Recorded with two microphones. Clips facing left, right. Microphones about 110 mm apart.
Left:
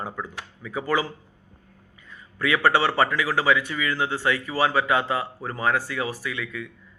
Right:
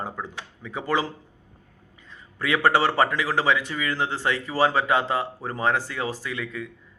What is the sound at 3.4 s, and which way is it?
Speech, 35° right (ahead or behind).